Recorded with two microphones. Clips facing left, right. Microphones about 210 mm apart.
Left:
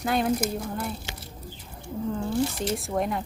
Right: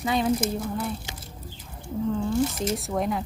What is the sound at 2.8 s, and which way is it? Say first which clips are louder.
Speech: right 1 dB; centre (ahead or behind).